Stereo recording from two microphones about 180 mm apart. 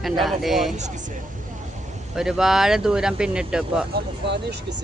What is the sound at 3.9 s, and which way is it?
Speech, 70° right (ahead or behind).